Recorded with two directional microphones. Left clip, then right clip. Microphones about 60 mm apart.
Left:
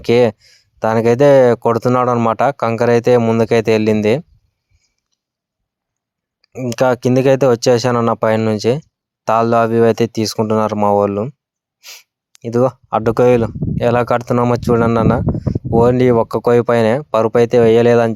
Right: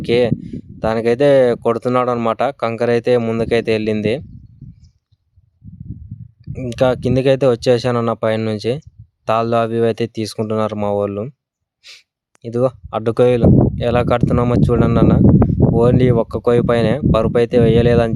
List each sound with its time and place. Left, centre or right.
0.0 s speech: left
6.4 s a sound: left
6.7 s speech: left
7.9 s speech: left
8.4 s speech: left
11.8 s sneeze: left
12.4 s speech: left
13.7 s speech: left